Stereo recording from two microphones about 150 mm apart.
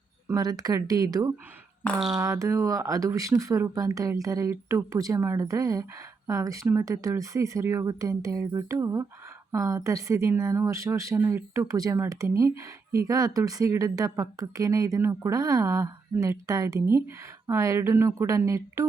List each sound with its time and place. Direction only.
0.3 s speech: 25° right (ahead or behind)
1.8 s speech: 5° left (ahead or behind)
2.1 s speech: 20° right (ahead or behind)